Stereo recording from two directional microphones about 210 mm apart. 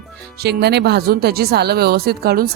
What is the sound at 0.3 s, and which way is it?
Speech, 50° right (ahead or behind).